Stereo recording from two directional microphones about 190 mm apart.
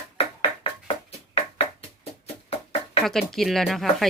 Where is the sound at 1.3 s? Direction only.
30° left (ahead or behind).